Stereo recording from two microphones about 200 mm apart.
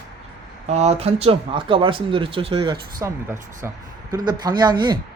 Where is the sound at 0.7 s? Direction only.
35° right (ahead or behind).